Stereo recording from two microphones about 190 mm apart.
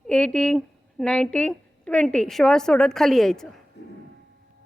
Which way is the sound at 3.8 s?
65° left (ahead or behind).